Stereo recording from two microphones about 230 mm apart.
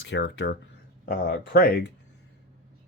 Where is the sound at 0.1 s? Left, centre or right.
Left.